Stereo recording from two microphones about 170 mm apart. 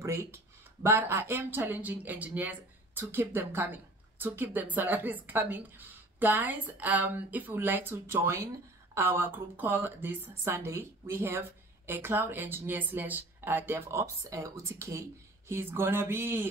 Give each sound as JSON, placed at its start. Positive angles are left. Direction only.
{"t": 0.0, "sound": "speech", "side_deg": -15}